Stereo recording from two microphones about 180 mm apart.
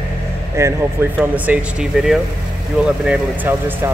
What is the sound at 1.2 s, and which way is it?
Speech, 5° right (ahead or behind).